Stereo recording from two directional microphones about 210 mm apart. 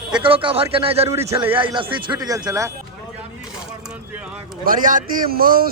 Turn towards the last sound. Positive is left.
turn(degrees=-45)  # may be behind; listen again after turning